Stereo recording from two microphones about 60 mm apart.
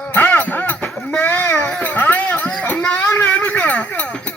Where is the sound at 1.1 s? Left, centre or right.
Left.